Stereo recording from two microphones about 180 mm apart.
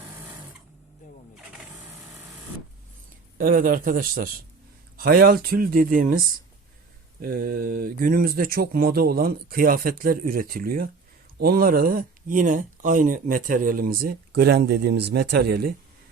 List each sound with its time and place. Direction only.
3.3 s a man's voice: 50° right (ahead or behind)